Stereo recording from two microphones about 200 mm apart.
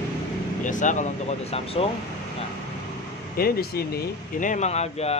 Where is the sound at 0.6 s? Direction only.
40° left (ahead or behind).